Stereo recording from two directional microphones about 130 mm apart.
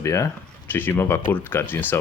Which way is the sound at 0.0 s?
25° left (ahead or behind).